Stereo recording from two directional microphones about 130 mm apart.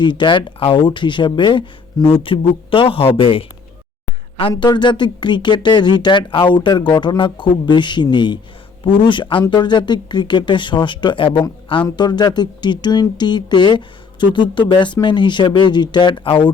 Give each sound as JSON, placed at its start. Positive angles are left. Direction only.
{"t": 0.0, "sound": "speech", "side_deg": 35}